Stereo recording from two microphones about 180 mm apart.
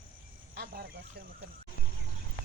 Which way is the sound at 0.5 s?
60° right (ahead or behind).